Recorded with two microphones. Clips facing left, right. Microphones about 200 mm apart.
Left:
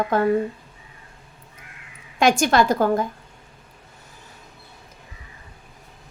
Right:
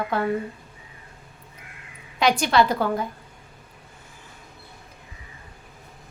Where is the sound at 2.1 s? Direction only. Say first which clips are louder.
Left 2 dB; 45° left (ahead or behind).